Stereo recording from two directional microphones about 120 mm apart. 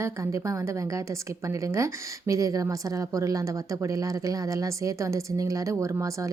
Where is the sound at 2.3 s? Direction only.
30° right (ahead or behind).